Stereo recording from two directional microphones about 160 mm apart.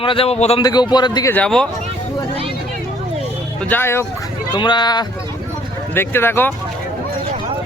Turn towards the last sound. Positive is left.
turn(degrees=15)  # may be behind; listen again after turning